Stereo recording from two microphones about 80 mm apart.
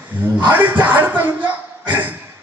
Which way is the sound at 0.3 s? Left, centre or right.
Right.